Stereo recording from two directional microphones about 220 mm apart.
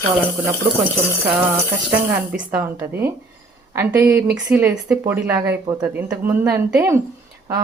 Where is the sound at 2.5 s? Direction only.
10° right (ahead or behind).